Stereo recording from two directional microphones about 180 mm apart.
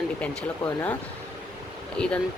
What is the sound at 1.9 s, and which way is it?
Speech, 5° left (ahead or behind).